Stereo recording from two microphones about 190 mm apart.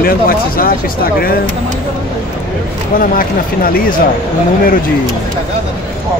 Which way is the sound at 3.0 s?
50° left (ahead or behind).